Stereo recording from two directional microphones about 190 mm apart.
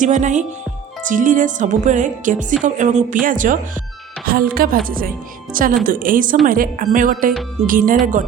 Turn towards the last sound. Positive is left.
turn(degrees=-45)  # may be behind; listen again after turning